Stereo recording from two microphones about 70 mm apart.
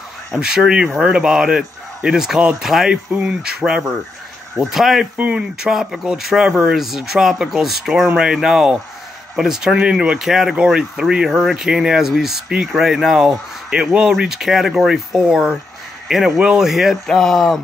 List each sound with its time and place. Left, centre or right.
0.3 s speech: centre
3.1 s speech: centre
5.1 s speech: right
5.4 s speech: centre
17.0 s speech: centre